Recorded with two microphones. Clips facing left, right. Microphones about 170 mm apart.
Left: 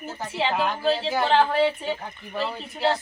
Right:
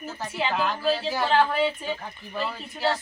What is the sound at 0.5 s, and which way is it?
A woman's voice, 15° left (ahead or behind).